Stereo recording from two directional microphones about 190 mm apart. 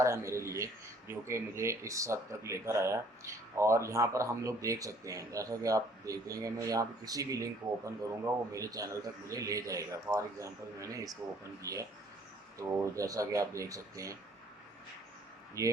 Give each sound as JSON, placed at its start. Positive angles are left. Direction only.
{"t": 0.0, "sound": "speech", "side_deg": -15}
{"t": 15.6, "sound": "speech", "side_deg": -15}